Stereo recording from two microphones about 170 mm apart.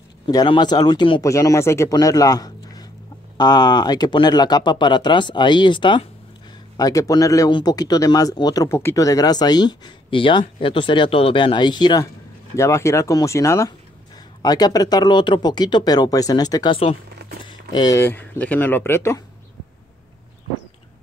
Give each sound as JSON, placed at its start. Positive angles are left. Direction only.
{"t": 0.3, "sound": "a man's voice", "side_deg": 25}